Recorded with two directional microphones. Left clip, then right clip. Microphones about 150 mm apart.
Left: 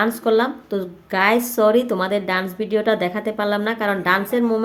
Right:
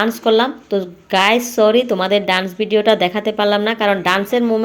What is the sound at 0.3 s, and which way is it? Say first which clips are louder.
Speech: right 5 dB; 15° right (ahead or behind).